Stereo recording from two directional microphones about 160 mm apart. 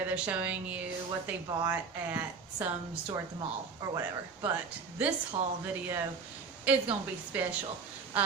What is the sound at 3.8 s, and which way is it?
Speech, 15° right (ahead or behind).